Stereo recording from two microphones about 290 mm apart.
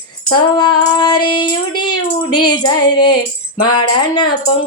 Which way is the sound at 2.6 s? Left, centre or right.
Centre.